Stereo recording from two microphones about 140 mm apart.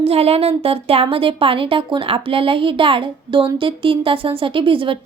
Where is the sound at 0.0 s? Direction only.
45° right (ahead or behind).